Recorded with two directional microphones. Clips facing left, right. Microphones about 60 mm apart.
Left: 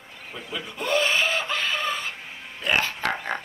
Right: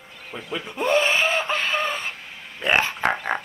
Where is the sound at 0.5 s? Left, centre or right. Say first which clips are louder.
Right 4 dB; right.